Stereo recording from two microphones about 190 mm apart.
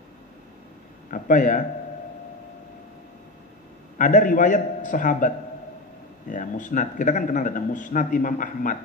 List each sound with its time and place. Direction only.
1.1 s speech: 45° left (ahead or behind)
4.0 s speech: 45° left (ahead or behind)